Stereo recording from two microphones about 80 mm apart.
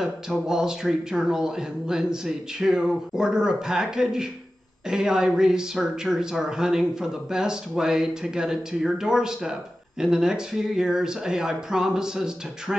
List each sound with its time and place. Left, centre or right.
0.0 s speech: centre